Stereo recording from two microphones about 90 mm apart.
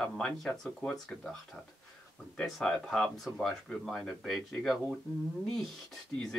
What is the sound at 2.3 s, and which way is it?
Speech, 10° left (ahead or behind).